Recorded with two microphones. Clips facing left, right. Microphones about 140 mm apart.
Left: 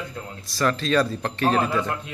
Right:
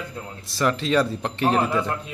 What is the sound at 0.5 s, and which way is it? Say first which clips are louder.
Speech: even; 20° right (ahead or behind).